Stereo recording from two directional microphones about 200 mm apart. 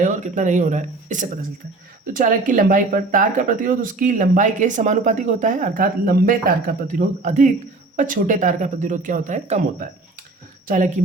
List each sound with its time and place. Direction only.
0.0 s speech: 40° right (ahead or behind)